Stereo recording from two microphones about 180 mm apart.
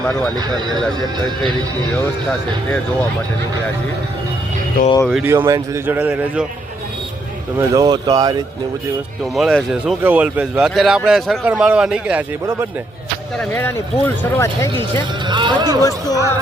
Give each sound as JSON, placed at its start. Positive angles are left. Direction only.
{"t": 0.0, "sound": "speech", "side_deg": 5}
{"t": 0.3, "sound": "speech", "side_deg": -25}
{"t": 5.0, "sound": "a man's voice", "side_deg": 0}
{"t": 5.3, "sound": "a man's voice", "side_deg": -15}
{"t": 7.6, "sound": "speech", "side_deg": -20}
{"t": 9.3, "sound": "a man's voice", "side_deg": 0}
{"t": 13.5, "sound": "speech", "side_deg": 15}
{"t": 15.3, "sound": "speech", "side_deg": -25}
{"t": 15.8, "sound": "speech", "side_deg": 20}